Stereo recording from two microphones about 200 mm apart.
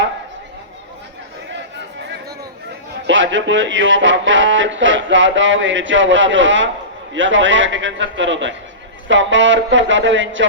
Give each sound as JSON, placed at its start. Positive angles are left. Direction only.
{"t": 3.1, "sound": "speech", "side_deg": -65}